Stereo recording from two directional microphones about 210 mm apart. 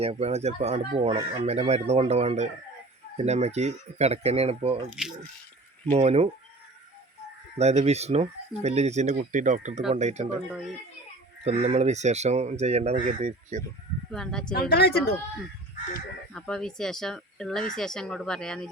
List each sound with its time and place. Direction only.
0.0 s speech: 30° right (ahead or behind)
4.9 s speech: centre (ahead or behind)
5.9 s speech: 30° right (ahead or behind)
7.6 s speech: 30° right (ahead or behind)
11.4 s speech: 30° right (ahead or behind)
14.1 s speech: 5° left (ahead or behind)
14.5 s speech: 50° left (ahead or behind)
16.3 s speech: 5° left (ahead or behind)